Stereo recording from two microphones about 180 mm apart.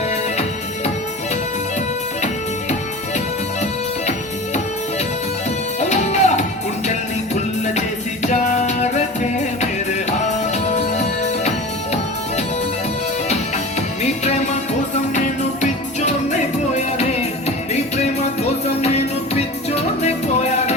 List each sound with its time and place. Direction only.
5.8 s music: 40° left (ahead or behind)
7.6 s music: 40° left (ahead or behind)
13.2 s music: 40° left (ahead or behind)
15.6 s music: 40° left (ahead or behind)
18.4 s music: 35° left (ahead or behind)